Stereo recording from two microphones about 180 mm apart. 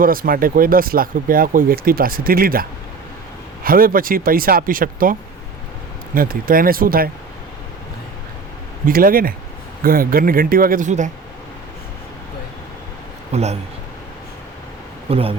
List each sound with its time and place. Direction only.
0.0 s speech: 50° right (ahead or behind)
6.1 s speech: 55° right (ahead or behind)
8.9 s speech: 55° right (ahead or behind)
13.3 s a man's voice: 35° right (ahead or behind)
15.1 s a man's voice: 30° right (ahead or behind)